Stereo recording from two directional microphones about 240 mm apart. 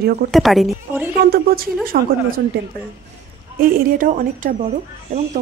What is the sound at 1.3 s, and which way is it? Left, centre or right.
Speech, right.